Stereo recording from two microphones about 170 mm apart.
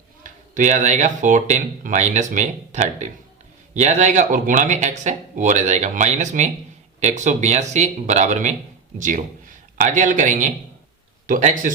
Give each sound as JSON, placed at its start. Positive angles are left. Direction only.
{"t": 0.2, "sound": "a man's voice", "side_deg": -50}